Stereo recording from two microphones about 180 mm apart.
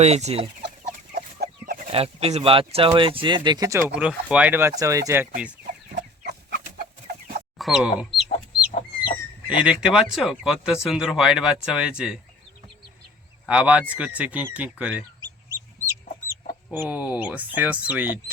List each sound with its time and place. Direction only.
0.0 s chicken: 35° right (ahead or behind)
1.1 s chicken: 55° right (ahead or behind)
1.9 s speech: 35° right (ahead or behind); by 5.3 s 15° right (ahead or behind)
6.2 s chicken: 65° right (ahead or behind)
7.6 s speech: centre (ahead or behind)
9.5 s speech: 5° right (ahead or behind)
13.4 s speech: 5° right (ahead or behind)
15.2 s chicken: 15° right (ahead or behind)
16.7 s speech: 10° right (ahead or behind)